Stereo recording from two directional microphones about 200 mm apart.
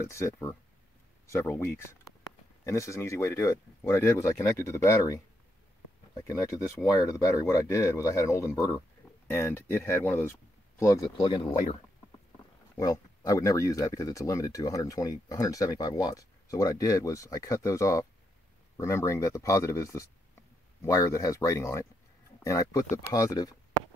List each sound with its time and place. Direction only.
0.1 s speech: 15° left (ahead or behind)
6.2 s speech: 15° left (ahead or behind)
12.7 s speech: 15° left (ahead or behind)